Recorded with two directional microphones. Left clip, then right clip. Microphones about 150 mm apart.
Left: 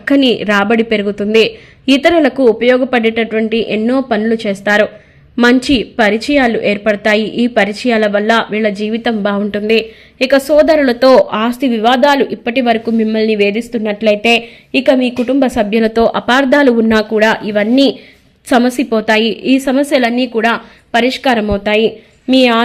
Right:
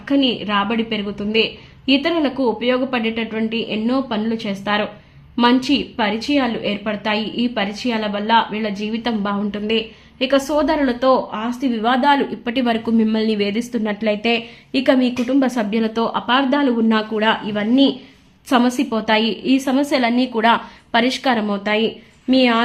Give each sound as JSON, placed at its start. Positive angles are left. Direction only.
{"t": 0.0, "sound": "a woman's voice", "side_deg": 40}
{"t": 11.3, "sound": "speech", "side_deg": 75}
{"t": 11.6, "sound": "a woman's voice", "side_deg": 40}
{"t": 18.4, "sound": "a woman's voice", "side_deg": 20}